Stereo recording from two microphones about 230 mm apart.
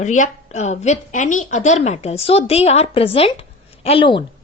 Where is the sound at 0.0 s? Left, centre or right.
Left.